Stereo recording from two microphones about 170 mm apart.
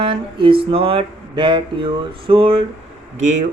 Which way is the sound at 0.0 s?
30° right (ahead or behind).